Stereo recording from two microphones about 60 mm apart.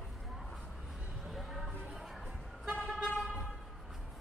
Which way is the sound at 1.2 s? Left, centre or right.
Centre.